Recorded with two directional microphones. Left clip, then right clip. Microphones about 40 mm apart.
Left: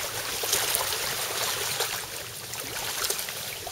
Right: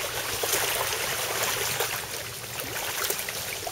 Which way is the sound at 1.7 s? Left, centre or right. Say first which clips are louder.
Right 1 dB; left.